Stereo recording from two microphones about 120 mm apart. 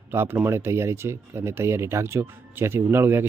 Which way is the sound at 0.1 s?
20° right (ahead or behind).